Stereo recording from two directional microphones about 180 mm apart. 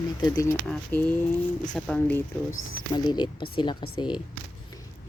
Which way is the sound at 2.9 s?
25° left (ahead or behind).